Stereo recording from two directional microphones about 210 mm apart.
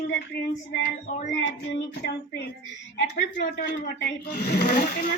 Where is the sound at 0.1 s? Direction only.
50° left (ahead or behind).